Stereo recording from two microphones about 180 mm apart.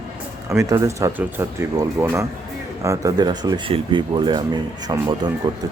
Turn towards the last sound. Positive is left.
turn(degrees=-25)  # may be behind; listen again after turning